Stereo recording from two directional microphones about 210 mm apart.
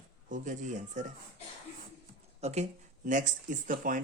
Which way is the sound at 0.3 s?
35° right (ahead or behind).